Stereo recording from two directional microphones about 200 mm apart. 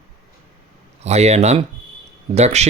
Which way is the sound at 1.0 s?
35° right (ahead or behind).